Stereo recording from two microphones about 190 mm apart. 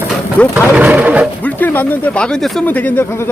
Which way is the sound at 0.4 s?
5° left (ahead or behind).